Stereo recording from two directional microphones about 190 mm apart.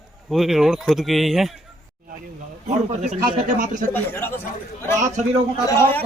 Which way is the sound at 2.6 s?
40° right (ahead or behind).